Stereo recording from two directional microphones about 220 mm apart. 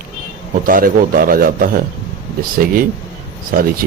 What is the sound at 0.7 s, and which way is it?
A man's voice, 40° right (ahead or behind).